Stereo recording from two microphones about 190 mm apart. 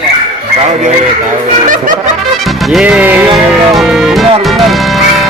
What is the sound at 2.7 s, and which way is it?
Music, 5° right (ahead or behind).